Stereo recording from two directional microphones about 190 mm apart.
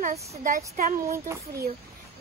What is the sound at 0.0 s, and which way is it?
Speech, 40° right (ahead or behind).